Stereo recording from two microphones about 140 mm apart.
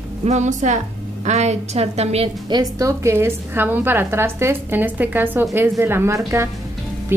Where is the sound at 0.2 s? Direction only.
55° right (ahead or behind).